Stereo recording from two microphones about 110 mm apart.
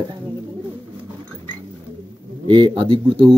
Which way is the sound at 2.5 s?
45° right (ahead or behind).